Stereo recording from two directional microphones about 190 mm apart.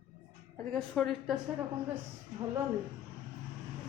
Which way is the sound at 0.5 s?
5° left (ahead or behind).